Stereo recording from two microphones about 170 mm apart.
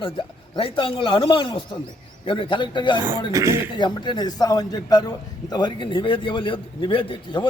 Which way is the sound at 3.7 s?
25° left (ahead or behind).